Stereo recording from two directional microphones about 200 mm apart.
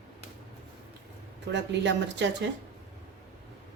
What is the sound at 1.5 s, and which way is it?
Speech, 60° right (ahead or behind).